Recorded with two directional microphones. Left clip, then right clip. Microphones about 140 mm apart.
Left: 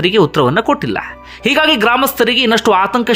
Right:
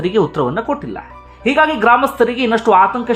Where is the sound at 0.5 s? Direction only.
30° left (ahead or behind).